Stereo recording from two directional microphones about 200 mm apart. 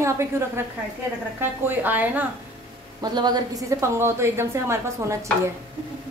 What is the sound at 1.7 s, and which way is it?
Speech, 10° right (ahead or behind).